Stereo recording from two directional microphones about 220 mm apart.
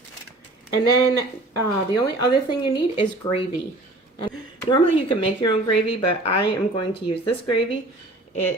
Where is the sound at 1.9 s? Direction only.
20° left (ahead or behind).